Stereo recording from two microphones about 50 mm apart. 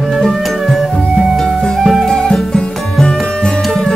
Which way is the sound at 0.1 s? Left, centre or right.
Centre.